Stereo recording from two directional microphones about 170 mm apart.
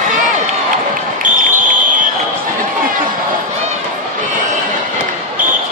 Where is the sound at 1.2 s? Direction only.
50° right (ahead or behind).